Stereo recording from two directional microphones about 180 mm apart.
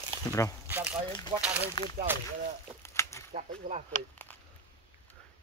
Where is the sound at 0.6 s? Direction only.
10° right (ahead or behind).